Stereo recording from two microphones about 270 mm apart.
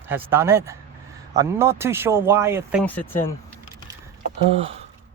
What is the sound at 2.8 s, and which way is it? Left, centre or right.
Speech, centre.